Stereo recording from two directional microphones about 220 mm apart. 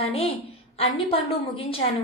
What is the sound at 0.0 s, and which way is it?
A woman's voice, 25° left (ahead or behind).